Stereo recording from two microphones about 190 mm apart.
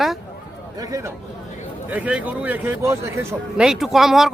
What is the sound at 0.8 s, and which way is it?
Speech, 15° right (ahead or behind).